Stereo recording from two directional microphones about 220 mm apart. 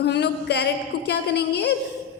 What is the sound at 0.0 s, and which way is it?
A woman's voice, 50° left (ahead or behind).